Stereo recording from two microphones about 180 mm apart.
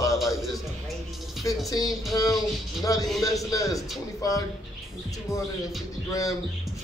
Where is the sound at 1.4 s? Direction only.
20° left (ahead or behind).